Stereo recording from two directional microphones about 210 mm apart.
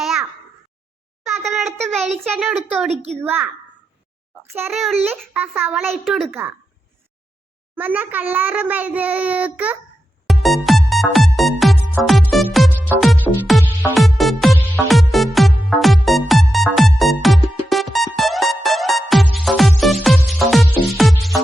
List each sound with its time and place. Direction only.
0.0 s a sound: centre (ahead or behind)
2.3 s a woman's voice: centre (ahead or behind)
2.9 s a child's voice: 30° right (ahead or behind)
3.2 s a child's voice: 10° right (ahead or behind)
4.7 s a woman's voice: centre (ahead or behind)
5.4 s a child's voice: 10° right (ahead or behind)
7.8 s a child's voice: 10° right (ahead or behind)
10.2 s music: centre (ahead or behind)